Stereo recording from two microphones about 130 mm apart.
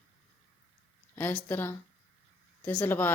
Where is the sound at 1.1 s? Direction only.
15° left (ahead or behind).